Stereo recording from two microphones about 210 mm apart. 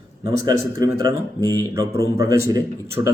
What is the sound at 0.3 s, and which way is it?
A man's voice, 20° right (ahead or behind).